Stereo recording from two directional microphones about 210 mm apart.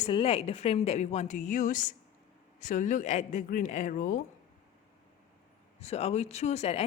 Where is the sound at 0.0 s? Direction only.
25° left (ahead or behind).